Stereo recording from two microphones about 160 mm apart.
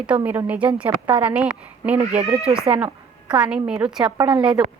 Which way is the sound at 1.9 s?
40° right (ahead or behind).